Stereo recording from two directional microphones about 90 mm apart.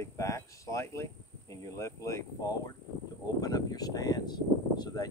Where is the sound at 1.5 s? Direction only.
40° left (ahead or behind).